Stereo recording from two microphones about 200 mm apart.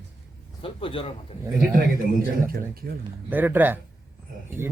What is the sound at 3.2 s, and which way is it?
Speech, 10° right (ahead or behind).